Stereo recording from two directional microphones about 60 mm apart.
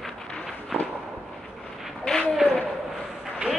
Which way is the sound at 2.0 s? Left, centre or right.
Centre.